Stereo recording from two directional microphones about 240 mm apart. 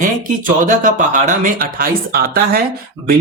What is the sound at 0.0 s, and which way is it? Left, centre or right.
Speech, right.